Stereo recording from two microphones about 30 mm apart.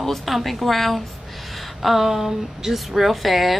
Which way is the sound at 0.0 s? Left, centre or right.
Centre.